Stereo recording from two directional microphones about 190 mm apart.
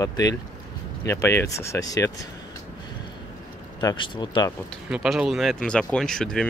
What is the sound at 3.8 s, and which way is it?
Speech, 25° left (ahead or behind).